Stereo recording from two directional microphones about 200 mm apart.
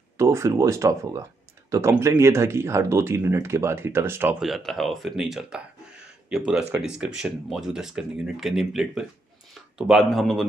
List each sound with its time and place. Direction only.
0.2 s speech: 15° right (ahead or behind)